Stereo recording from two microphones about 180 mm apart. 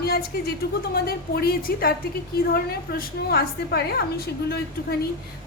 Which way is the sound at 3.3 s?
60° left (ahead or behind).